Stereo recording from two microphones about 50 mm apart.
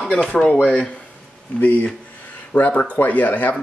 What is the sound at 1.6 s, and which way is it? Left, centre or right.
Speech, left.